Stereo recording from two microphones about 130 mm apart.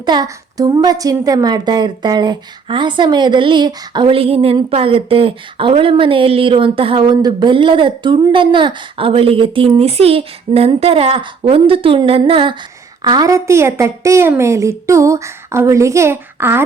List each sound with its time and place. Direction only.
0.0 s a woman's voice: 30° right (ahead or behind)